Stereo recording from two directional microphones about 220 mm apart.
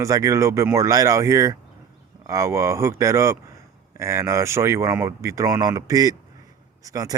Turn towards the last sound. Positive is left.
turn(degrees=-15)  # may be behind; listen again after turning